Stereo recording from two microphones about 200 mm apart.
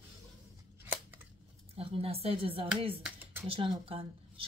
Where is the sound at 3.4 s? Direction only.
25° right (ahead or behind).